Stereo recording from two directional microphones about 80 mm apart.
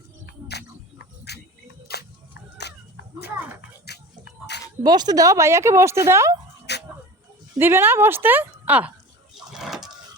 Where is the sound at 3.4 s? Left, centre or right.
Right.